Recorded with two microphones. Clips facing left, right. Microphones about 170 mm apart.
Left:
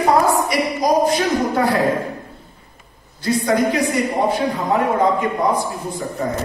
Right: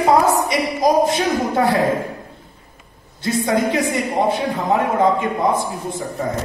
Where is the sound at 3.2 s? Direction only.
25° right (ahead or behind).